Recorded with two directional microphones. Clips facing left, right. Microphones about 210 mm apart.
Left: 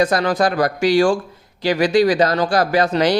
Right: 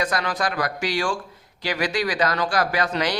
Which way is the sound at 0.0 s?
30° left (ahead or behind).